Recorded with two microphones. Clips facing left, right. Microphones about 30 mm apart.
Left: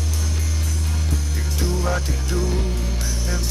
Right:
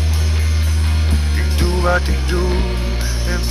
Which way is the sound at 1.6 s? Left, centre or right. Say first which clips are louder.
Right 7 dB; right.